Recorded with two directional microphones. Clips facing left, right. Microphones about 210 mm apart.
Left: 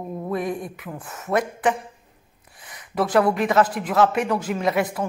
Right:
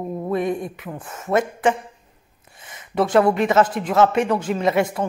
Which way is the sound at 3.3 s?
Centre (ahead or behind).